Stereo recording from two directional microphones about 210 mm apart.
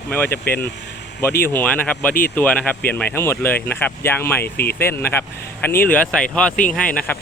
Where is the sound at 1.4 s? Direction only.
10° left (ahead or behind).